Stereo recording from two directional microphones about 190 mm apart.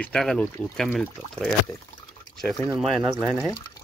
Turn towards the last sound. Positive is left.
turn(degrees=0)  # may be behind; listen again after turning